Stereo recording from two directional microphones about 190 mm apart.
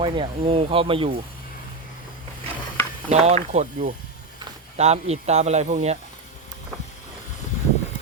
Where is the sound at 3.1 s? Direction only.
35° right (ahead or behind).